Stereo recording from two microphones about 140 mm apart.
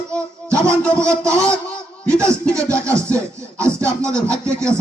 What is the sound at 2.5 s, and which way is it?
Music, 20° right (ahead or behind).